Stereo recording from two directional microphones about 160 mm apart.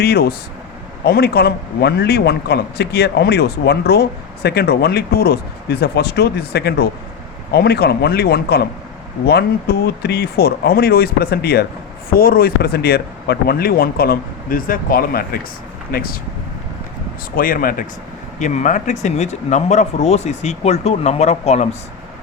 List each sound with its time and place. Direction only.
0.0 s a man's voice: 80° left
12.1 s speech: 65° left (ahead or behind)
17.3 s speech: 60° left (ahead or behind)
18.3 s speech: 50° left (ahead or behind)